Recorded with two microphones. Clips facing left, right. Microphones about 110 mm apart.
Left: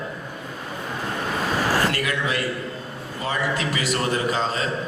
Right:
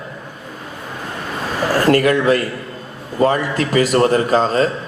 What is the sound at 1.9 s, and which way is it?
A man's voice, 45° right (ahead or behind).